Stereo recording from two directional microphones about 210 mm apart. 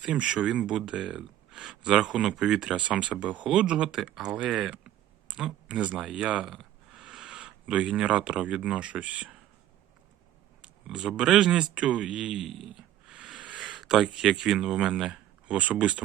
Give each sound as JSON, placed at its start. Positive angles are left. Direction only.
{"t": 0.0, "sound": "speech", "side_deg": -5}
{"t": 10.6, "sound": "speech", "side_deg": -5}